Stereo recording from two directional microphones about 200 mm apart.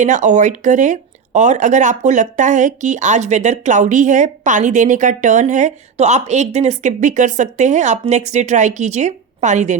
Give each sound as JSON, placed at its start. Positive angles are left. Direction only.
{"t": 0.0, "sound": "speech", "side_deg": -40}